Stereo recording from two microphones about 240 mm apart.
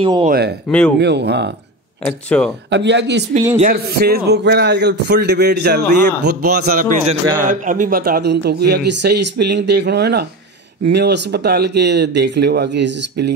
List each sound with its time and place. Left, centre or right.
0.0 s speech: right
0.3 s speech: right
0.7 s speech: centre
0.9 s a man's voice: right
2.2 s speech: centre
2.7 s a man's voice: right
7.1 s a man's voice: centre
7.4 s a man's voice: right